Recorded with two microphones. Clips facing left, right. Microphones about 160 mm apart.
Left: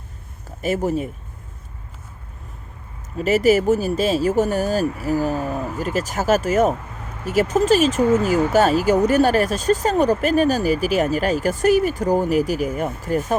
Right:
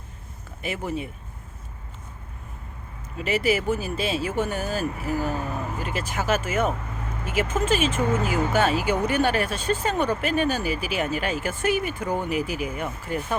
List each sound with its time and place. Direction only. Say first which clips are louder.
0.6 s speech: left 8 dB; 40° left (ahead or behind)
3.2 s speech: left 7 dB; 40° left (ahead or behind)